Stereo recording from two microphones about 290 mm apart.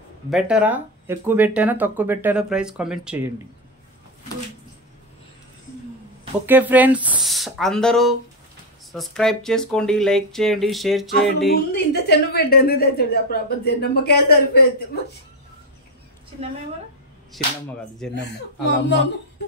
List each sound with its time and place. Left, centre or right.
0.3 s speech: centre
6.4 s speech: centre
11.5 s a woman's voice: left
18.1 s a woman's voice: left